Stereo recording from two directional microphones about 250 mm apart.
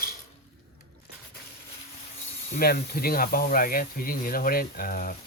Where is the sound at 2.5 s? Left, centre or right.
Left.